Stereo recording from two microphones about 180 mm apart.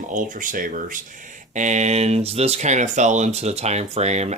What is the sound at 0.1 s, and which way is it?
Speech, 45° right (ahead or behind).